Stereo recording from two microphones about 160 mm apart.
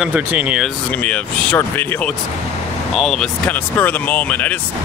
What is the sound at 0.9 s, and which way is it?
Speech, 10° left (ahead or behind).